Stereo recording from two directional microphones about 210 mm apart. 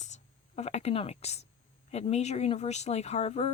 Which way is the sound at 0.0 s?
35° left (ahead or behind).